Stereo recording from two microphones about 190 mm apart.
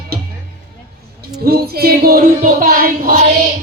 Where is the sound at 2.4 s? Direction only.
45° right (ahead or behind).